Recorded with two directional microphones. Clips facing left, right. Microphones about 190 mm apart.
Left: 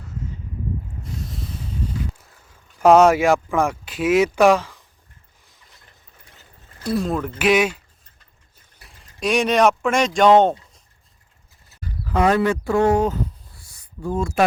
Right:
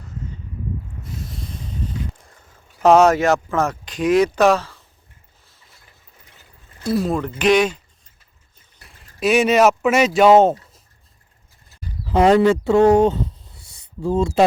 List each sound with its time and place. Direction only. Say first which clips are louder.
2.8 s speech: even; 10° left (ahead or behind)
6.8 s speech: right 2 dB; centre (ahead or behind)
8.8 s speech: right 4 dB; centre (ahead or behind)
12.0 s speech: right 5 dB; 25° right (ahead or behind)